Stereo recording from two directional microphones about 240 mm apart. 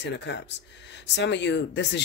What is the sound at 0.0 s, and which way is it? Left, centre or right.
Speech, left.